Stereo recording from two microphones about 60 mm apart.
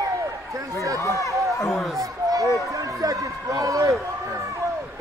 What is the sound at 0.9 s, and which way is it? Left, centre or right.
Speech, left.